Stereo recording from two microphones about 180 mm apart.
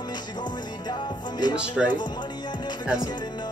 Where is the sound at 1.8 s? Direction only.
5° right (ahead or behind).